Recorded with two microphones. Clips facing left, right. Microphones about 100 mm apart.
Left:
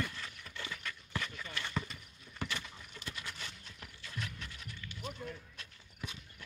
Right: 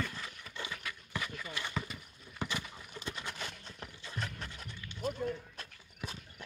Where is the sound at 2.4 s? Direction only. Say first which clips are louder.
Right 2 dB; 20° right (ahead or behind); by 6.2 s 40° right (ahead or behind).